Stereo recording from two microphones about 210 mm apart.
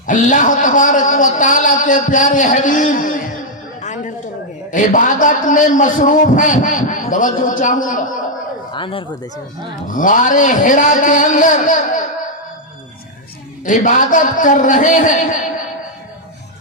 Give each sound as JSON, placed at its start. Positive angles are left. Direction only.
{"t": 0.1, "sound": "a man's voice", "side_deg": 35}
{"t": 3.8, "sound": "a sound", "side_deg": 35}
{"t": 4.7, "sound": "a man's voice", "side_deg": 40}
{"t": 8.7, "sound": "speech", "side_deg": 25}
{"t": 9.9, "sound": "a man's voice", "side_deg": 40}
{"t": 13.7, "sound": "a man's voice", "side_deg": 40}